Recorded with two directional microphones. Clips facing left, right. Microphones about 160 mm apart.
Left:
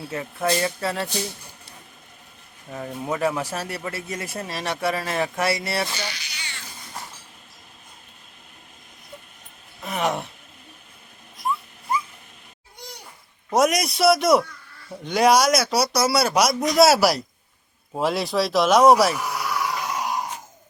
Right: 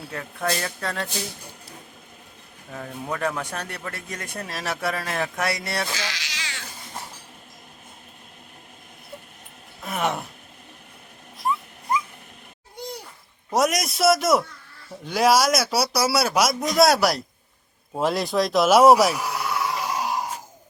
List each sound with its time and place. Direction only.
0.1 s speech: 5° left (ahead or behind)
2.7 s speech: 5° left (ahead or behind)
5.9 s cat: 90° right
9.8 s gasp: centre (ahead or behind)
11.3 s dog: centre (ahead or behind)
13.5 s a sound: centre (ahead or behind)
15.0 s speech: centre (ahead or behind)
19.5 s a sound: 25° right (ahead or behind)